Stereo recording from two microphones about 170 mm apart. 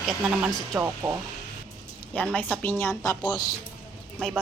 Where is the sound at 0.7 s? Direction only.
15° right (ahead or behind).